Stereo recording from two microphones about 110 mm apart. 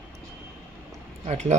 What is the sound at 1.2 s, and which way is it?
Speech, 90° right.